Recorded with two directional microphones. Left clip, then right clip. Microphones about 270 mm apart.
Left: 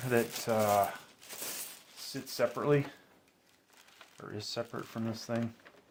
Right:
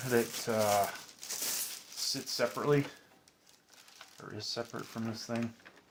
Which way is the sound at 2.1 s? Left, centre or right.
Left.